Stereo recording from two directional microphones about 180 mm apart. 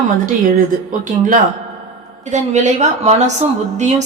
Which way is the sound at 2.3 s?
40° right (ahead or behind).